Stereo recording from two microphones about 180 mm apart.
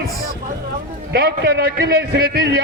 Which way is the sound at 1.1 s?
65° right (ahead or behind).